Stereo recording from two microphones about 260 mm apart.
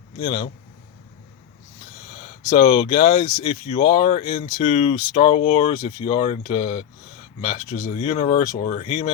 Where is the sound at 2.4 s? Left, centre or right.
Centre.